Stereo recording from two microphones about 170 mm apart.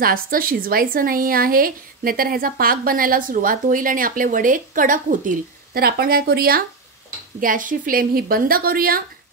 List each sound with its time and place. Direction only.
0.0 s a woman's voice: 55° right (ahead or behind)
7.3 s a woman's voice: 50° right (ahead or behind)